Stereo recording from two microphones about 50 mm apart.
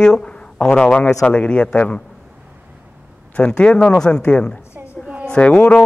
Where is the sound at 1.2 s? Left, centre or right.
Left.